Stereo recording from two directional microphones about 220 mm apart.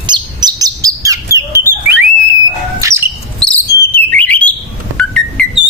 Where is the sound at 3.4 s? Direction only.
5° left (ahead or behind).